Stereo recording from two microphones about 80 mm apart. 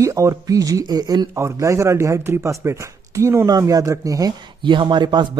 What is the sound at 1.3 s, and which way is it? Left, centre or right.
Speech, right.